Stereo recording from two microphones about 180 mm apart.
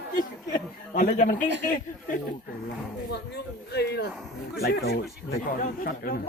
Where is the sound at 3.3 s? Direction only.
65° left (ahead or behind).